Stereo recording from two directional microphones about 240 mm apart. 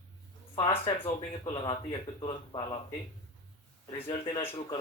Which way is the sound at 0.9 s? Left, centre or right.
Left.